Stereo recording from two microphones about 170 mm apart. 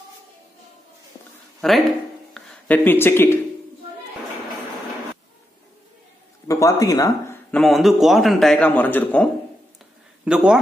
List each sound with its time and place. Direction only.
1.6 s a man's voice: centre (ahead or behind)
2.3 s a sound: 10° left (ahead or behind)
6.4 s speech: 20° left (ahead or behind)
7.5 s a man's voice: centre (ahead or behind)
10.2 s a man's voice: 5° right (ahead or behind)